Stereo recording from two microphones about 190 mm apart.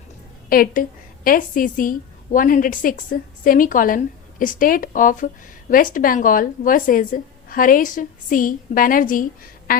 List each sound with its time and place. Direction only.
0.5 s a woman's voice: 50° left (ahead or behind)